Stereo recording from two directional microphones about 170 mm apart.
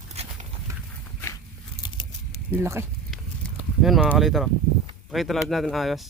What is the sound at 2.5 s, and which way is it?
Speech, 15° right (ahead or behind).